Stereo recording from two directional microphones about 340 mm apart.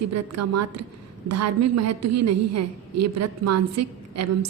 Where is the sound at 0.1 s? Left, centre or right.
Right.